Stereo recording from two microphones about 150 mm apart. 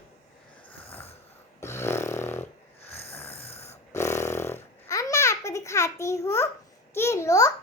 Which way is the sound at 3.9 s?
20° left (ahead or behind).